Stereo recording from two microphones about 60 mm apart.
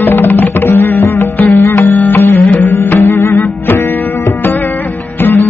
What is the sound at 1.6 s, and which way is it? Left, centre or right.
Music, left.